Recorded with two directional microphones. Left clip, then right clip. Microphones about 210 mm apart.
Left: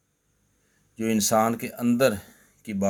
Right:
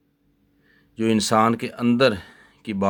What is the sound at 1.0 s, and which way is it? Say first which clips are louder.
Speech: right 4 dB; 40° right (ahead or behind).